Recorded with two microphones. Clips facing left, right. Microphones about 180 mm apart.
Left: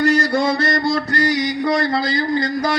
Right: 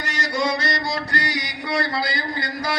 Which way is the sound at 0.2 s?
55° left (ahead or behind).